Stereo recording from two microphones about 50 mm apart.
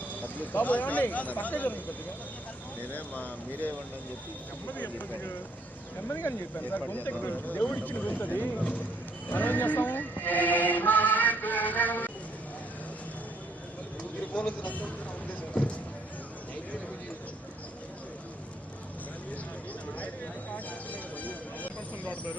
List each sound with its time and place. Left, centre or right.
0.2 s speech: left
2.9 s speech: left
6.1 s speech: left
6.6 s speech: left
14.3 s speech: left
20.7 s vehicle: left